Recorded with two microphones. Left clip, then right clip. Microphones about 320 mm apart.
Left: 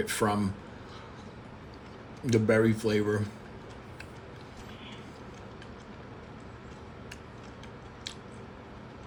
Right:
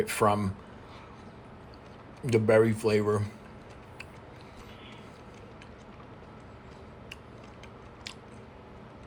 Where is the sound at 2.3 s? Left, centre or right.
Centre.